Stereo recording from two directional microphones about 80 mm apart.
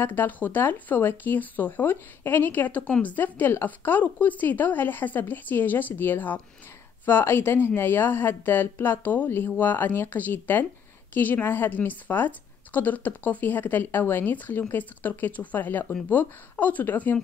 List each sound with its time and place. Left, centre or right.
0.0 s a woman's voice: left